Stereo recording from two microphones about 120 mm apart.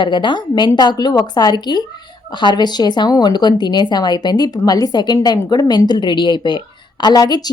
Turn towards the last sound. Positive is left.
turn(degrees=35)  # may be behind; listen again after turning